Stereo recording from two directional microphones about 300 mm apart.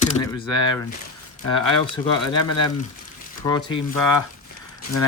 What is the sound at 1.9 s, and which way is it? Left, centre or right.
Speech, centre.